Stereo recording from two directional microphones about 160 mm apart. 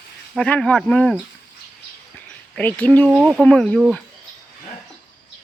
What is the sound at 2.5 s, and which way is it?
Speech, 10° left (ahead or behind).